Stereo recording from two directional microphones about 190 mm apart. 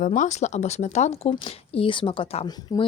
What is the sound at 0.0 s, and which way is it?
Speech, 40° left (ahead or behind).